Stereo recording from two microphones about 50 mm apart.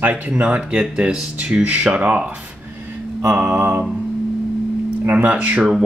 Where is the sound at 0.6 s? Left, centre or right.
Centre.